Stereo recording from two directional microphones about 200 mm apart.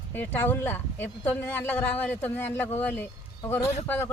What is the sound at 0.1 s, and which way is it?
Speech, 10° left (ahead or behind).